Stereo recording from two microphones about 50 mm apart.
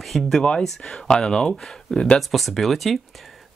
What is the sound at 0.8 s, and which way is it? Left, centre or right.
Speech, centre.